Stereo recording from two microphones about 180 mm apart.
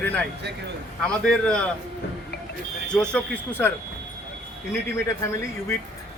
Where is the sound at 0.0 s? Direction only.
10° left (ahead or behind).